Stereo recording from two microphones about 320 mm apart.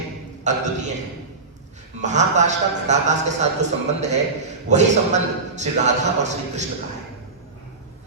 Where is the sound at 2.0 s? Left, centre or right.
Right.